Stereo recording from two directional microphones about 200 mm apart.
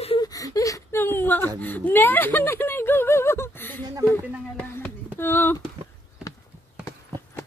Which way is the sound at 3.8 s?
15° right (ahead or behind).